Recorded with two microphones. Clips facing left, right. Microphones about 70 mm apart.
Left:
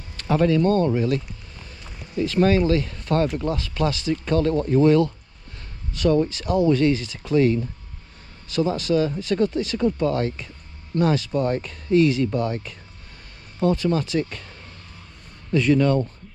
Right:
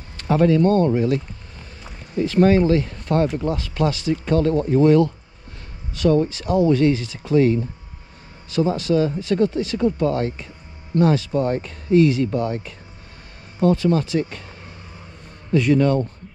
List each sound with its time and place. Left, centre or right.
0.3 s speech: right
6.2 s speech: right
15.5 s speech: right